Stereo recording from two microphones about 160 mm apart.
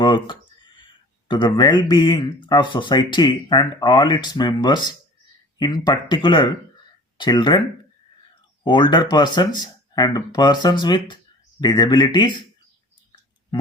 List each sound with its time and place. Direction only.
0.0 s speech: 30° left (ahead or behind)
8.6 s speech: 30° left (ahead or behind)